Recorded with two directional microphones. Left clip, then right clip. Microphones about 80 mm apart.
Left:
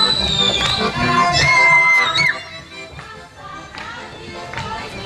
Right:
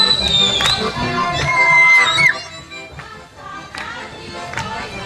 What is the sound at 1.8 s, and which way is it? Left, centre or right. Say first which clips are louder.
Music: right 3 dB; right.